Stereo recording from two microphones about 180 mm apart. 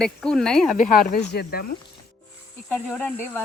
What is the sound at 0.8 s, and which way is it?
Speech, 50° left (ahead or behind).